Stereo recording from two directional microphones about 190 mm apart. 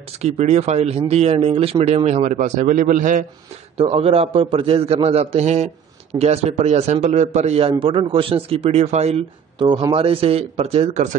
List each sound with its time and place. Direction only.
0.2 s a man's voice: 35° right (ahead or behind)
3.7 s a man's voice: 30° right (ahead or behind)